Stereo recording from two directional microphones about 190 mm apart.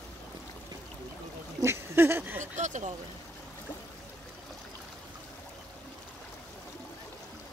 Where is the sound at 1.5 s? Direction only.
15° right (ahead or behind).